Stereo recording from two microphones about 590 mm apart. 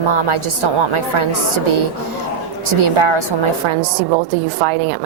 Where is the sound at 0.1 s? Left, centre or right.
Right.